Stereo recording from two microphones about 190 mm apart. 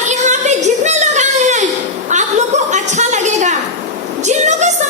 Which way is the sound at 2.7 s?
40° right (ahead or behind).